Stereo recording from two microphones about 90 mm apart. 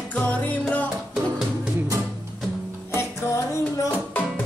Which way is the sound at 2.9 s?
30° left (ahead or behind).